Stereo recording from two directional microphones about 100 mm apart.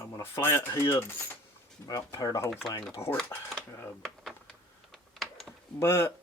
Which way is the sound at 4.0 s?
5° left (ahead or behind).